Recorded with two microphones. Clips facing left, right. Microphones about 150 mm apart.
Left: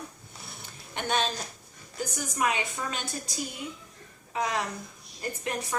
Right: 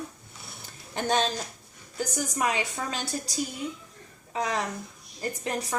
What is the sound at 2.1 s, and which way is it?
Speech, 30° right (ahead or behind).